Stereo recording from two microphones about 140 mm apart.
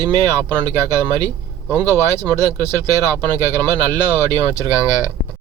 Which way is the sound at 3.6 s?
30° right (ahead or behind).